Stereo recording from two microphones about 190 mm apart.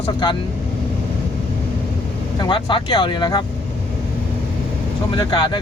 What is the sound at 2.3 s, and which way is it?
Speech, 25° left (ahead or behind).